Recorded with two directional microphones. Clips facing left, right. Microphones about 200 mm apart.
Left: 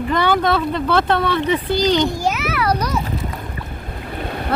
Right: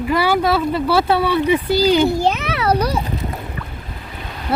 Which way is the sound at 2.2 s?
30° right (ahead or behind).